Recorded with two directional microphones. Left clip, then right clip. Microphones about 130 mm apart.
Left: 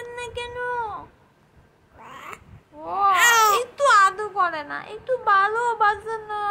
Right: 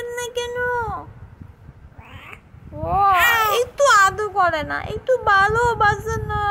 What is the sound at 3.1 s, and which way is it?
Speech, 35° left (ahead or behind).